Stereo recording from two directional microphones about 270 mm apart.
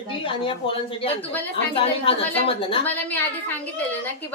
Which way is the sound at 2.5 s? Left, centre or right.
Centre.